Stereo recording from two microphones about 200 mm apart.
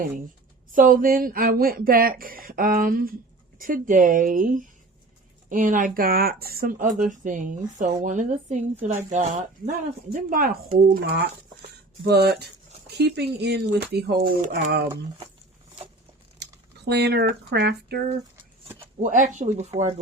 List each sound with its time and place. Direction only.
0.7 s speech: 45° right (ahead or behind)
11.6 s speech: 50° right (ahead or behind)
16.4 s speech: 55° right (ahead or behind)
18.9 s speech: 40° right (ahead or behind)